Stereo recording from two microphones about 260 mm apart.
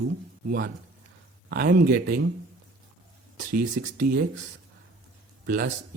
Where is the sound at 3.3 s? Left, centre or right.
Right.